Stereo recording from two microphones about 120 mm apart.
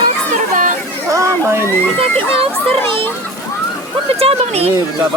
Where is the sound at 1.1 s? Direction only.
20° right (ahead or behind).